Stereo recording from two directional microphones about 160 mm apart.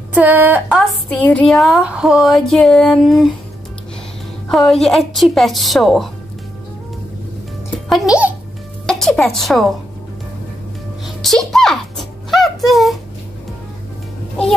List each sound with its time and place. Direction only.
0.1 s a woman's voice: 10° right (ahead or behind)
4.5 s a woman's voice: centre (ahead or behind)
7.9 s a woman's voice: 5° right (ahead or behind)
8.8 s a woman's voice: 5° left (ahead or behind)
11.2 s a sound: centre (ahead or behind)